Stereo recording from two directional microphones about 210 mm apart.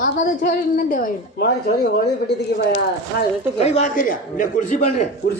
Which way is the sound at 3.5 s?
30° left (ahead or behind).